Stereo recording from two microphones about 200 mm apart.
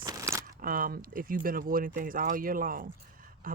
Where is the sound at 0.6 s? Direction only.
45° right (ahead or behind).